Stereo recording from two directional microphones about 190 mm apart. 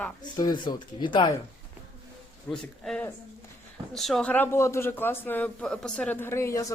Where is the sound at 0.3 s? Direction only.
25° left (ahead or behind).